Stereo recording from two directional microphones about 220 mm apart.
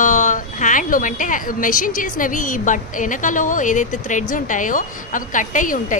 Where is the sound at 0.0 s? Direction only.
35° left (ahead or behind).